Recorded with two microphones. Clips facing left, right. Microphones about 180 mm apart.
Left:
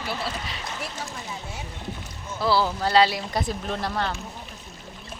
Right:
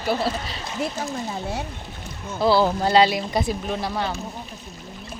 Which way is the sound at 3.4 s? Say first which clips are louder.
Right 3 dB; 5° right (ahead or behind).